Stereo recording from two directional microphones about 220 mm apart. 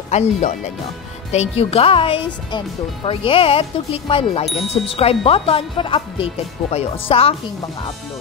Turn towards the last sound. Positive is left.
turn(degrees=25)  # may be behind; listen again after turning